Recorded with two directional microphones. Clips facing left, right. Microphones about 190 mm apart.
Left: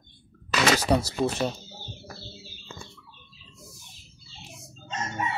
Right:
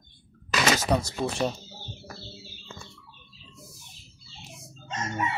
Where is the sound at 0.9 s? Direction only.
10° left (ahead or behind).